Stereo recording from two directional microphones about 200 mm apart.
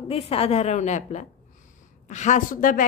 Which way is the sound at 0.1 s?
30° left (ahead or behind).